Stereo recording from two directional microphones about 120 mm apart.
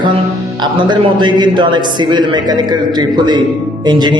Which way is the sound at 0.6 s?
40° right (ahead or behind).